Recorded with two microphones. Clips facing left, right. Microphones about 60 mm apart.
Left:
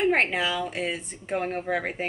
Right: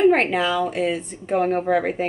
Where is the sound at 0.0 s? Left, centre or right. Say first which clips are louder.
Right 6 dB; centre.